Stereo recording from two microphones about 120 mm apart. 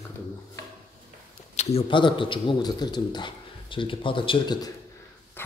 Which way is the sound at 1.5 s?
65° left (ahead or behind).